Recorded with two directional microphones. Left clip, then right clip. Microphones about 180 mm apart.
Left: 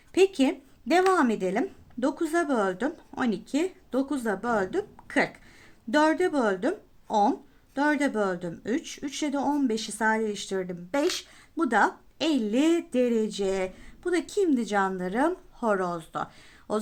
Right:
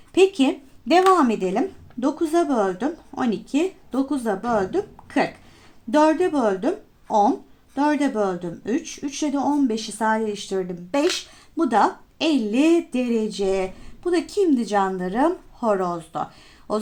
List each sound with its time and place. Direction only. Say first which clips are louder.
0.1 s a woman's voice: right 5 dB; 30° left (ahead or behind)